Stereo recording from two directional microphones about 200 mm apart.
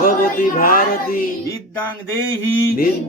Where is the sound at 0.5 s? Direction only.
45° left (ahead or behind).